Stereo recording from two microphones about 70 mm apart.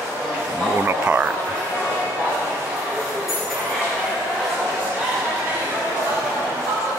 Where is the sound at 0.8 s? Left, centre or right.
Right.